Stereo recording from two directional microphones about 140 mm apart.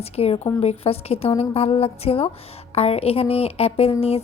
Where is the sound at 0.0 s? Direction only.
45° left (ahead or behind).